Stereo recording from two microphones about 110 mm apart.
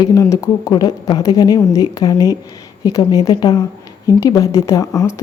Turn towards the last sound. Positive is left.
turn(degrees=30)  # may be behind; listen again after turning